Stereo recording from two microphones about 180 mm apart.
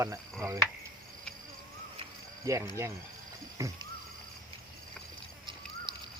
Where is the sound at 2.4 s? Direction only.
15° right (ahead or behind).